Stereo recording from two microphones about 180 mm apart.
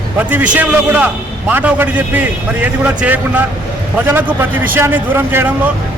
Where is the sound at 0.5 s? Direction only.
10° right (ahead or behind).